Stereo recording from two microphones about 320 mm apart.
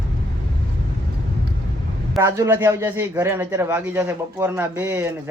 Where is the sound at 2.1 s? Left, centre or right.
Centre.